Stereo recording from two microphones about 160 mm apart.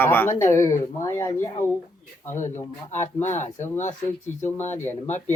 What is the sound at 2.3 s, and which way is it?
Speech, 50° left (ahead or behind).